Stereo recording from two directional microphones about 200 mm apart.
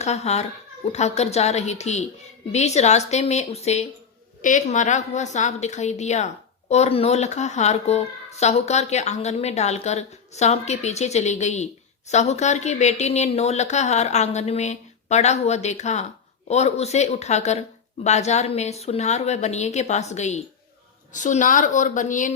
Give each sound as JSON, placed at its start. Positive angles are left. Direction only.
{"t": 0.0, "sound": "a woman's voice", "side_deg": 35}